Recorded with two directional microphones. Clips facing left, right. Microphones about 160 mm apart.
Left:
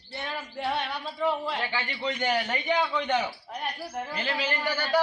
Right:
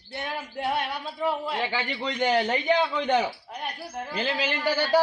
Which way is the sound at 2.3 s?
30° right (ahead or behind).